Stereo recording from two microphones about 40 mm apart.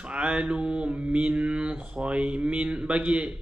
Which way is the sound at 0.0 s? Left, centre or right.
Right.